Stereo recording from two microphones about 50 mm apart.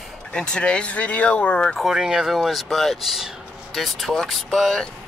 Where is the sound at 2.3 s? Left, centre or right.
Centre.